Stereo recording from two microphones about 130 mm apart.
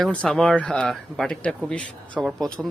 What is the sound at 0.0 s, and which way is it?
Speech, 10° left (ahead or behind).